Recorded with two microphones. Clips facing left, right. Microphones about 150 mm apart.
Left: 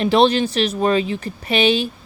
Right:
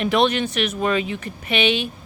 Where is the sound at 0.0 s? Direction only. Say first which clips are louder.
Left 4 dB; 30° left (ahead or behind).